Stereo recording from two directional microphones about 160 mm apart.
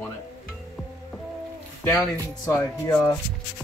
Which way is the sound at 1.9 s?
10° left (ahead or behind).